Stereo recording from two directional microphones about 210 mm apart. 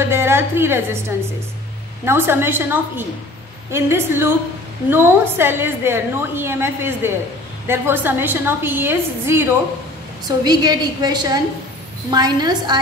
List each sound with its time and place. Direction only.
0.1 s a woman's voice: 10° right (ahead or behind)